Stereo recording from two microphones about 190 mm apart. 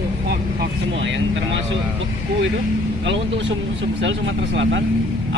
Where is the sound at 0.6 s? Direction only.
75° right (ahead or behind).